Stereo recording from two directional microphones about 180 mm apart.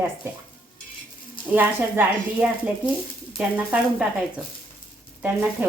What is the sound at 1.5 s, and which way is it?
Speech, 10° right (ahead or behind).